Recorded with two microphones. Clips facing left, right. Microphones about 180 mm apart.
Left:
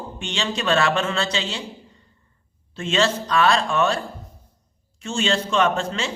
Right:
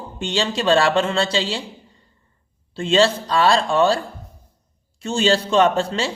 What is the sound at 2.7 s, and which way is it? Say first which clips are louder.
A man's voice: right 5 dB; 30° right (ahead or behind).